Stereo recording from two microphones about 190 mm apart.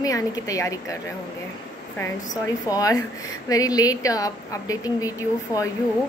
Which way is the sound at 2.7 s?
20° left (ahead or behind).